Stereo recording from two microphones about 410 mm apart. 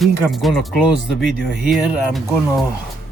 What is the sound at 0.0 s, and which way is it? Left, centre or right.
Speech, centre.